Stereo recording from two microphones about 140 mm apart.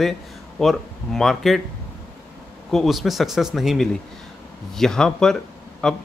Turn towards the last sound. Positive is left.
turn(degrees=5)  # may be behind; listen again after turning